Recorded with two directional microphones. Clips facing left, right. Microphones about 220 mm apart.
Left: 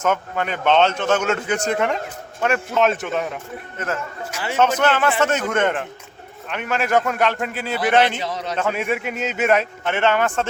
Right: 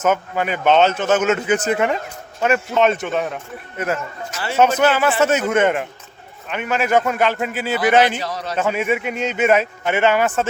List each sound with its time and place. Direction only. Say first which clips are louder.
0.0 s speech: right 3 dB; 5° right (ahead or behind)
3.8 s a man's voice: right 4 dB; 10° right (ahead or behind)
4.3 s a man's voice: even; 15° left (ahead or behind)
4.8 s a man's voice: right 2 dB; 10° right (ahead or behind)
8.2 s a man's voice: even; 20° left (ahead or behind)
8.5 s speech: right 4 dB; 5° right (ahead or behind)